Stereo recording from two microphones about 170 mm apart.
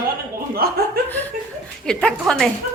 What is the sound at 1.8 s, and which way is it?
Speech, 5° left (ahead or behind).